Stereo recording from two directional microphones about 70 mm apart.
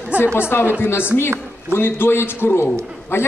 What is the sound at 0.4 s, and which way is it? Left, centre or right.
A man's voice, left.